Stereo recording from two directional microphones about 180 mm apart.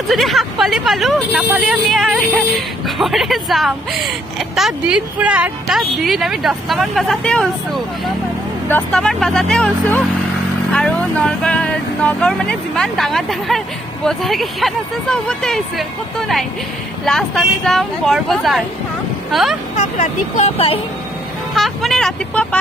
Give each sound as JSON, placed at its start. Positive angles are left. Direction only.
{"t": 0.1, "sound": "speech", "side_deg": 0}
{"t": 19.8, "sound": "speech", "side_deg": 40}
{"t": 21.5, "sound": "speech", "side_deg": 0}